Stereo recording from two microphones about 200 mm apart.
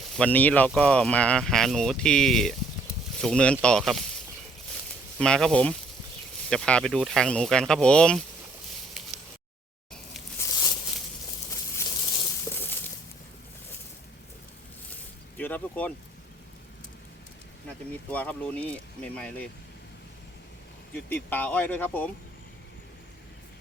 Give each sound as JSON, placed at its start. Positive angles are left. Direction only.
{"t": 0.1, "sound": "speech", "side_deg": 5}
{"t": 5.2, "sound": "speech", "side_deg": 5}
{"t": 15.4, "sound": "a sound", "side_deg": 10}
{"t": 17.9, "sound": "speech", "side_deg": 10}
{"t": 20.9, "sound": "speech", "side_deg": 10}